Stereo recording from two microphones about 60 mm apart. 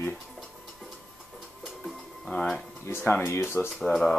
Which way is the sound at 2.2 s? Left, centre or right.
Centre.